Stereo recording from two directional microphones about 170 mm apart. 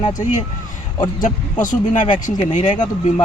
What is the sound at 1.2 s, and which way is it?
Speech, 50° left (ahead or behind).